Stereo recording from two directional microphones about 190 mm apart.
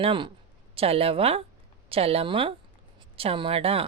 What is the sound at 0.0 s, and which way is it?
A woman's voice, 25° right (ahead or behind).